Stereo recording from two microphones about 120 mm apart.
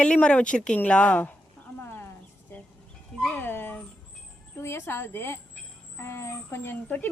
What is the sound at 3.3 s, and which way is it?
Music, 15° left (ahead or behind).